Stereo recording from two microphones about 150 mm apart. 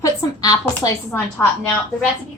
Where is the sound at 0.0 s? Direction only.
25° left (ahead or behind).